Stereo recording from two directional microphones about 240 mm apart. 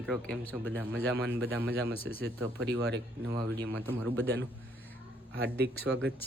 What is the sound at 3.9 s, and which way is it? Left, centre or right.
Speech, centre.